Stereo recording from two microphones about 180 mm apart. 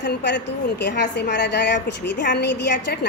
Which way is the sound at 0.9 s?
75° left (ahead or behind).